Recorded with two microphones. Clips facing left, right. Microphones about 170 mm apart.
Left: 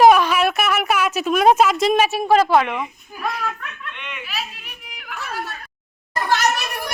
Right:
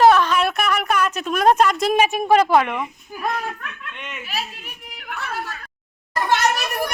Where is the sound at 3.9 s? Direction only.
45° right (ahead or behind).